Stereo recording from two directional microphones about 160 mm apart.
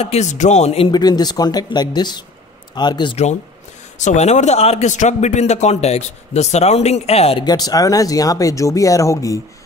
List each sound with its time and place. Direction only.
0.0 s speech: 45° left (ahead or behind)
4.0 s a man's voice: 45° left (ahead or behind)
7.4 s speech: 25° left (ahead or behind)